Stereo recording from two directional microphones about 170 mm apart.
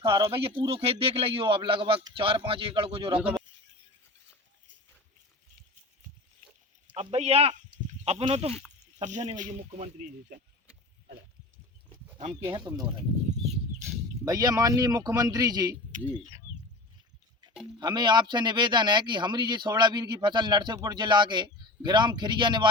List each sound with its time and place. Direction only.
0.0 s a man's voice: 30° right (ahead or behind)
6.9 s a man's voice: 40° right (ahead or behind)
14.3 s speech: 20° right (ahead or behind)
17.7 s speech: 25° right (ahead or behind)